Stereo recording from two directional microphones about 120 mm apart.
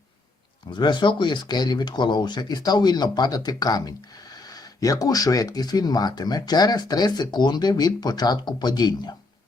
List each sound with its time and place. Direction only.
0.7 s speech: 40° left (ahead or behind)